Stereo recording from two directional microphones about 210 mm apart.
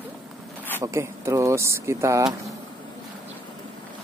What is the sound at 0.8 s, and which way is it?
Speech, 15° right (ahead or behind).